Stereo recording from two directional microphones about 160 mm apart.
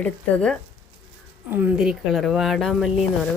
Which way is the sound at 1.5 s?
10° right (ahead or behind).